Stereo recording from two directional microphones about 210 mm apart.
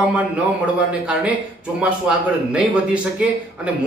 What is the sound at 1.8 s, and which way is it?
Speech, 5° right (ahead or behind).